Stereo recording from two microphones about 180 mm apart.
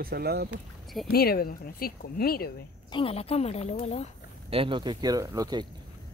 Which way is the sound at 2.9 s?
30° left (ahead or behind).